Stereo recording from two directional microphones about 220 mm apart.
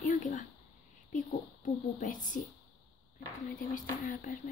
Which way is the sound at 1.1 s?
35° left (ahead or behind).